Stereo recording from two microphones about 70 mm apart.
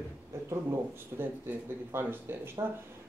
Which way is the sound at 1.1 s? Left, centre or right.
Right.